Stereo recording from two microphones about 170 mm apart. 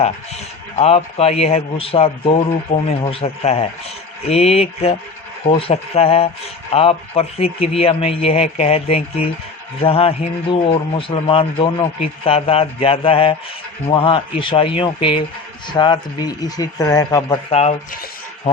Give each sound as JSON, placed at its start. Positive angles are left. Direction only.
{"t": 0.8, "sound": "a man's voice", "side_deg": 35}
{"t": 2.7, "sound": "speech", "side_deg": 50}
{"t": 3.1, "sound": "a man's voice", "side_deg": 35}
{"t": 17.5, "sound": "a man's voice", "side_deg": 35}